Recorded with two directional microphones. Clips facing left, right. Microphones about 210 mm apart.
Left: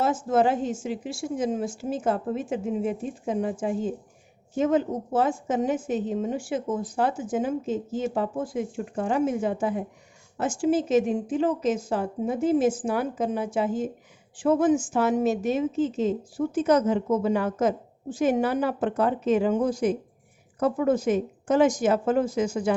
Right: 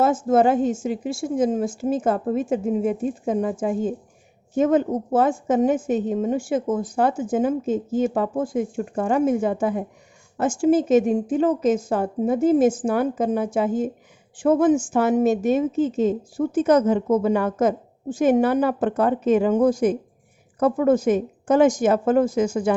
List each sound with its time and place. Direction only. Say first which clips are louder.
0.0 s a woman's voice: right 5 dB; 50° right (ahead or behind)